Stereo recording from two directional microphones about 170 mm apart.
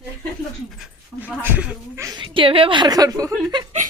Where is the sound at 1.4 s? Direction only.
10° right (ahead or behind).